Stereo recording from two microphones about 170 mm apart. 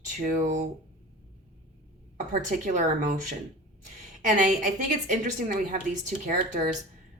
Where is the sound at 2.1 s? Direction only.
50° right (ahead or behind).